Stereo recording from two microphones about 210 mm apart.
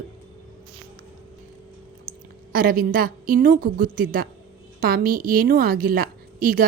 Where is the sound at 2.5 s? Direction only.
45° right (ahead or behind).